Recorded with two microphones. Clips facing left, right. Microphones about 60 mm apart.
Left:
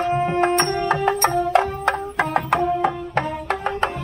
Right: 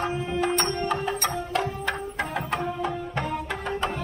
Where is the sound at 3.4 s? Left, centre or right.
Left.